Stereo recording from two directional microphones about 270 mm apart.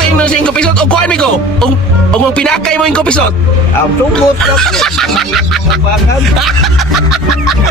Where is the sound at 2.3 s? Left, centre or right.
Centre.